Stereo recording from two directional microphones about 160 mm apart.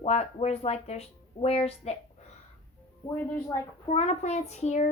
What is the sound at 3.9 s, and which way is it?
Speech, 45° left (ahead or behind).